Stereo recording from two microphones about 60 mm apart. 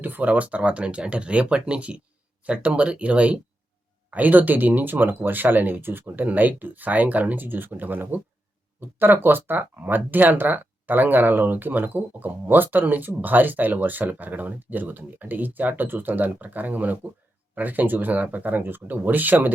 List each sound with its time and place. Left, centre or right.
0.0 s speech: right